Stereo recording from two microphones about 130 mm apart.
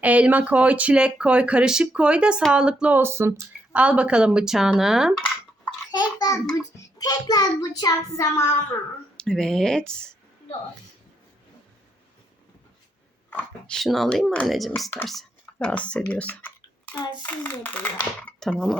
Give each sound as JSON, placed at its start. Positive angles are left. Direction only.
{"t": 0.0, "sound": "speech", "side_deg": -10}
{"t": 3.7, "sound": "speech", "side_deg": -10}
{"t": 5.9, "sound": "a child's voice", "side_deg": 30}
{"t": 9.1, "sound": "speech", "side_deg": 5}
{"t": 13.3, "sound": "speech", "side_deg": 5}
{"t": 17.0, "sound": "a child's voice", "side_deg": 35}
{"t": 17.2, "sound": "speech", "side_deg": 15}